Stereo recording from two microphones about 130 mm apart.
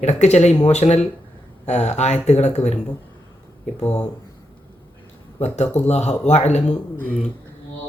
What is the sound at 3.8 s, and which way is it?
Speech, 15° left (ahead or behind).